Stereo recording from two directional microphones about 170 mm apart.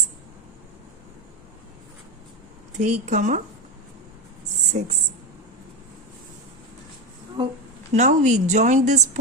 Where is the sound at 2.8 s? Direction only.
45° right (ahead or behind).